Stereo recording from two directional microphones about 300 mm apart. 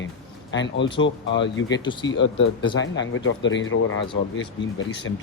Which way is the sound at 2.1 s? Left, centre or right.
Left.